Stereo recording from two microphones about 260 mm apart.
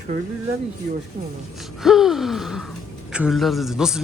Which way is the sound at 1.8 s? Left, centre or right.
Centre.